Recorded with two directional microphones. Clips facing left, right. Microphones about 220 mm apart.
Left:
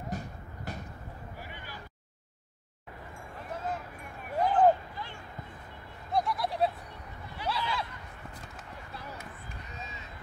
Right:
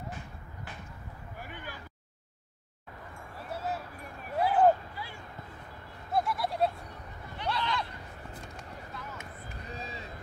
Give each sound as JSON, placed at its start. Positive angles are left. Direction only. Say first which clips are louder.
{"t": 0.1, "sound": "a sound", "louder": "left 6 dB", "side_deg": 40}
{"t": 1.4, "sound": "vehicle", "louder": "right 6 dB", "side_deg": -50}
{"t": 3.5, "sound": "vehicle", "louder": "right 1 dB", "side_deg": -10}
{"t": 4.4, "sound": "a sound", "louder": "even", "side_deg": -5}
{"t": 7.3, "sound": "goat", "louder": "right 1 dB", "side_deg": 5}
{"t": 9.7, "sound": "vehicle", "louder": "right 6 dB", "side_deg": -35}